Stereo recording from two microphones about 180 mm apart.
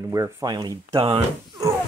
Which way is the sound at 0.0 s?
15° right (ahead or behind).